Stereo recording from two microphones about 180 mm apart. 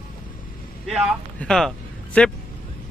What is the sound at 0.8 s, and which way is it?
Speech, 5° right (ahead or behind).